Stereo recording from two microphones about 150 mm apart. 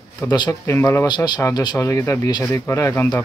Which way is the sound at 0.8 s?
15° left (ahead or behind).